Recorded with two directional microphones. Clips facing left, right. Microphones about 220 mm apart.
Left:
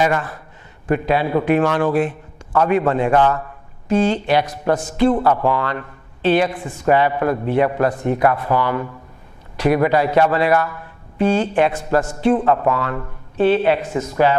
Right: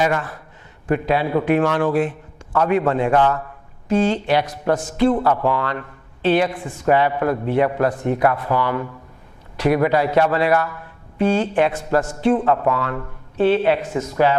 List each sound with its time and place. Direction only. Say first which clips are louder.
0.0 s a man's voice: left 1 dB; 15° left (ahead or behind)